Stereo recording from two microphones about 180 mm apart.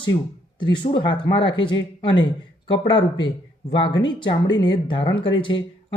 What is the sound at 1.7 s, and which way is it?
Speech, 90° left.